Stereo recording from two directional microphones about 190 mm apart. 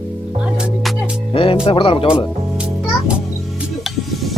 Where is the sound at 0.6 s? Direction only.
5° right (ahead or behind).